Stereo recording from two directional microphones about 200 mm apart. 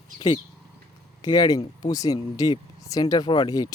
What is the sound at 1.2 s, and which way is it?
Speech, 20° left (ahead or behind).